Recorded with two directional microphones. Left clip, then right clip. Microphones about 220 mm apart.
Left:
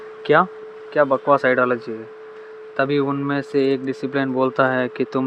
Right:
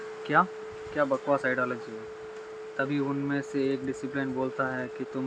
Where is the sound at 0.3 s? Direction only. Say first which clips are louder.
Left 9 dB; 35° left (ahead or behind).